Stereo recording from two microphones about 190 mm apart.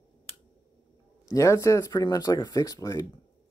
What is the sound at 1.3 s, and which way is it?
Speech, 15° left (ahead or behind).